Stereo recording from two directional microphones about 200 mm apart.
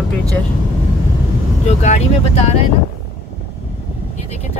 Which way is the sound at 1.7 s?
35° left (ahead or behind).